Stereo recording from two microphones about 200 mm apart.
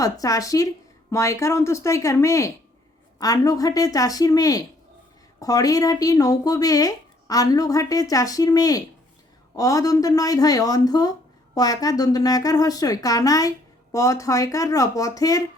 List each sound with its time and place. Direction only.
0.0 s speech: 15° left (ahead or behind)